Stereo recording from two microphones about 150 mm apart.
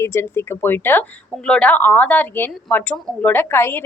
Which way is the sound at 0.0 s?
15° left (ahead or behind).